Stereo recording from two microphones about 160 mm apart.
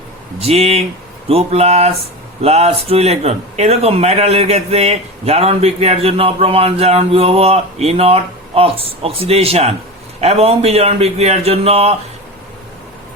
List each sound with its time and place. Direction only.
0.3 s speech: 40° right (ahead or behind)